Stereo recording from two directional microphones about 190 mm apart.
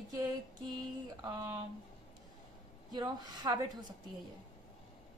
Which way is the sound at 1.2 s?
20° right (ahead or behind).